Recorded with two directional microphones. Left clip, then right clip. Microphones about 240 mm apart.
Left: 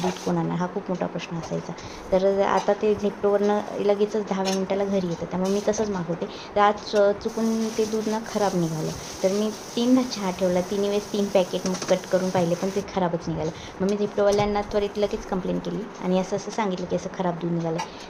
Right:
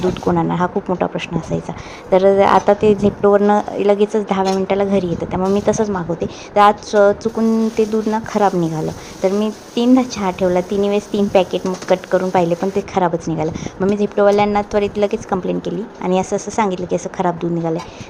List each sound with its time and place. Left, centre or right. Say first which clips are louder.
0.3 s a woman's voice: right 10 dB; right